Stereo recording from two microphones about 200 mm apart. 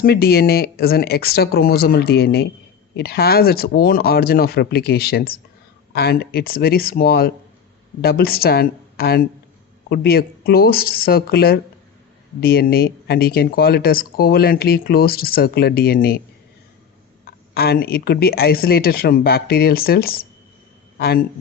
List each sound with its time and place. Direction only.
0.0 s speech: 50° left (ahead or behind)
17.5 s speech: 50° left (ahead or behind)